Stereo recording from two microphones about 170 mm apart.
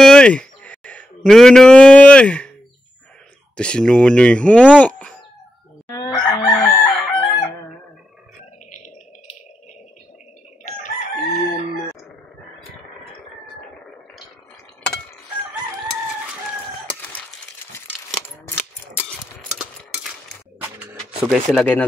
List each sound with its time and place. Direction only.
0.0 s a sound: 5° left (ahead or behind)
3.5 s speech: 5° left (ahead or behind)
5.9 s chicken: 20° left (ahead or behind)
6.9 s chicken: centre (ahead or behind)
17.7 s a sound: 10° left (ahead or behind)
21.3 s speech: 5° left (ahead or behind)